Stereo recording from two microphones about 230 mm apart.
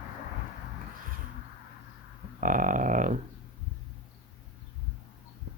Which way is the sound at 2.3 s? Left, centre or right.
Right.